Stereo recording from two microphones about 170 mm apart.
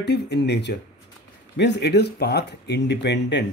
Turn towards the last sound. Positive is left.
turn(degrees=90)